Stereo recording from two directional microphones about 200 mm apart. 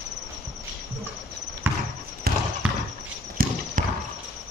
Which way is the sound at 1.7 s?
10° right (ahead or behind).